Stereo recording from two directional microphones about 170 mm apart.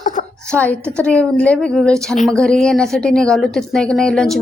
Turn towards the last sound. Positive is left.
turn(degrees=5)  # may be behind; listen again after turning